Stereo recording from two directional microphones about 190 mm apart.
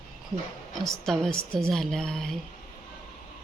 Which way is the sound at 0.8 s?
Centre (ahead or behind).